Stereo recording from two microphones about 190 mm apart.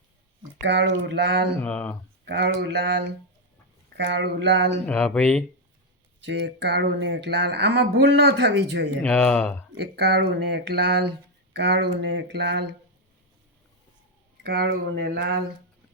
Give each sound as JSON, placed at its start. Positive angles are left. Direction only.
{"t": 0.6, "sound": "speech", "side_deg": -65}
{"t": 1.6, "sound": "speech", "side_deg": 5}
{"t": 2.2, "sound": "speech", "side_deg": -60}
{"t": 4.9, "sound": "speech", "side_deg": 5}
{"t": 6.2, "sound": "speech", "side_deg": -70}
{"t": 9.0, "sound": "speech", "side_deg": 5}
{"t": 9.7, "sound": "speech", "side_deg": -60}
{"t": 14.4, "sound": "speech", "side_deg": -55}